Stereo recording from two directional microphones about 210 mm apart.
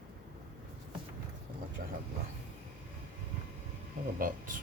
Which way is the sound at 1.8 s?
40° right (ahead or behind).